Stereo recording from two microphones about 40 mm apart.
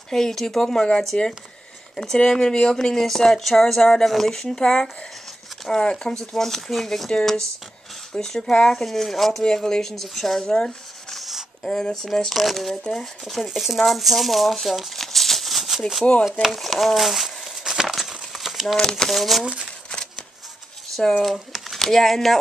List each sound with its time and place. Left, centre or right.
0.1 s a woman's voice: centre
8.1 s a woman's voice: centre
9.4 s a woman's voice: centre
11.9 s speech: centre
13.5 s speech: centre
15.0 s a sound: centre
16.0 s a woman's voice: centre
16.5 s crumpling: centre
18.8 s a woman's voice: centre
19.0 s speech: centre
19.5 s shuffling cards: left
21.2 s speech: centre